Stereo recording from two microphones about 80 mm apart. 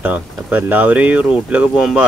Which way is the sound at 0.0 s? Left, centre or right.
Right.